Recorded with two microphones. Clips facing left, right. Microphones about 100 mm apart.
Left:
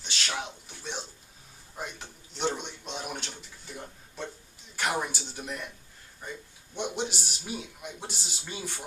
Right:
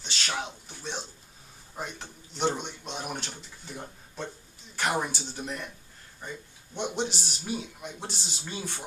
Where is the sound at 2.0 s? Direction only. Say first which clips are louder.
Right 4 dB; 5° right (ahead or behind).